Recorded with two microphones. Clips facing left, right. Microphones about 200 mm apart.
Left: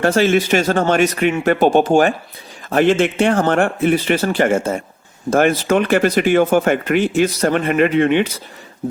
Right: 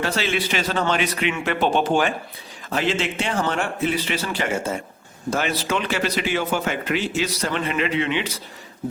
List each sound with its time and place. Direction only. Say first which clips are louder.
0.0 s speech: left 10 dB; 50° left (ahead or behind)